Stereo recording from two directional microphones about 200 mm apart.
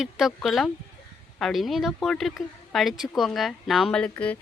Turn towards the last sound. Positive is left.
turn(degrees=5)  # may be behind; listen again after turning